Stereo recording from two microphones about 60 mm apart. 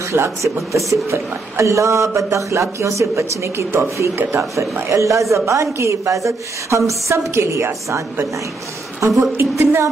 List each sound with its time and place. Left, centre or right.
0.1 s a woman's voice: right
0.6 s speech: centre
1.1 s a woman's voice: right
9.0 s speech: right